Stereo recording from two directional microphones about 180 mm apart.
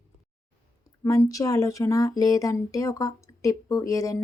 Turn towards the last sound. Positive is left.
turn(degrees=20)  # may be behind; listen again after turning